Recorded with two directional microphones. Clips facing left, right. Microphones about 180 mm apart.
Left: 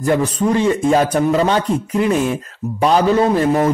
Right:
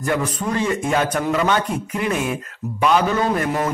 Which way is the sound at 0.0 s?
30° left (ahead or behind).